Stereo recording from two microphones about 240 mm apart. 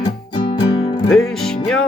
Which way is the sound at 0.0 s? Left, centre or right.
Centre.